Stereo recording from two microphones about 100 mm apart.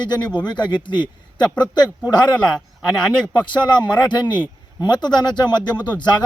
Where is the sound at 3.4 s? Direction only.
50° left (ahead or behind).